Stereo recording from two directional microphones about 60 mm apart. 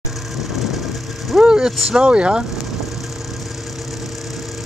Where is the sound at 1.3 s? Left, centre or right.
Centre.